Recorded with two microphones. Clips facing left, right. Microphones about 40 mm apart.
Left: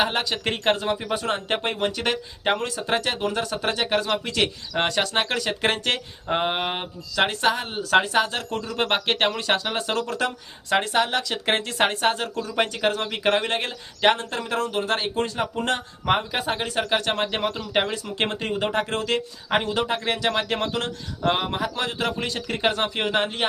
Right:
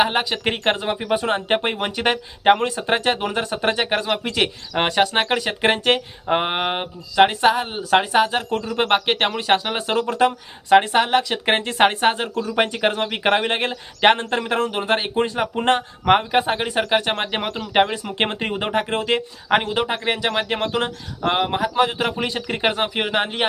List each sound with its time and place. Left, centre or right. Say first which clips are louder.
0.0 s speech: right 4 dB; centre